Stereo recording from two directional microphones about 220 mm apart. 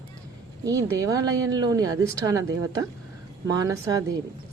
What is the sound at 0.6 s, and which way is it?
Speech, 15° right (ahead or behind).